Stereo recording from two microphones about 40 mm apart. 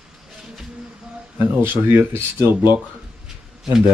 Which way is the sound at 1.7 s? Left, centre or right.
Right.